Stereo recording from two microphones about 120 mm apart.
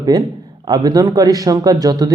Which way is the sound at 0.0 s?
30° right (ahead or behind).